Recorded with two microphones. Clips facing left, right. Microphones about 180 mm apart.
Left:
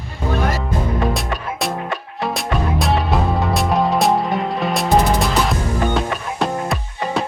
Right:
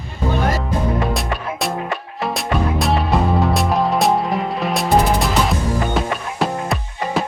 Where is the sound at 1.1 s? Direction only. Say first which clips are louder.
Right 1 dB; centre (ahead or behind).